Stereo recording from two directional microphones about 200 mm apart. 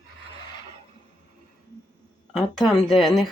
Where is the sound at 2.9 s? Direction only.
Centre (ahead or behind).